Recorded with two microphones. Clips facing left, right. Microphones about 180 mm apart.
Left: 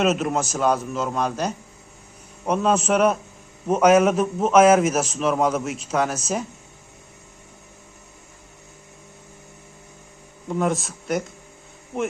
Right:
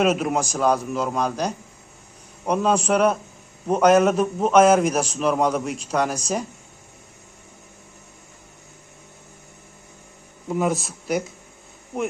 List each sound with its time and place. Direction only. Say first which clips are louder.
0.0 s a man's voice: right 1 dB; centre (ahead or behind)
10.5 s a man's voice: even; 5° right (ahead or behind)